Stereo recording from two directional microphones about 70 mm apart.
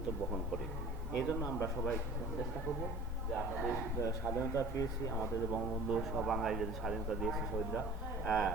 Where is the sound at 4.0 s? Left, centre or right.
Left.